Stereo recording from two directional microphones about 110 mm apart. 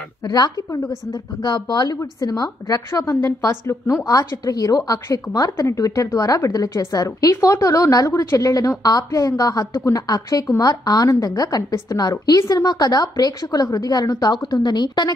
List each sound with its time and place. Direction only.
0.2 s a woman's voice: 35° left (ahead or behind)